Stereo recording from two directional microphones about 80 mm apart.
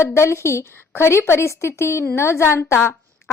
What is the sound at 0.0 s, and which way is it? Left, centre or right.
A woman's voice, left.